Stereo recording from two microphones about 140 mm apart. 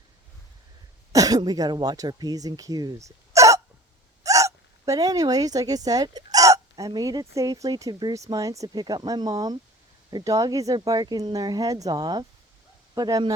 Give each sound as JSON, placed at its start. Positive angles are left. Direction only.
{"t": 1.1, "sound": "speech", "side_deg": -25}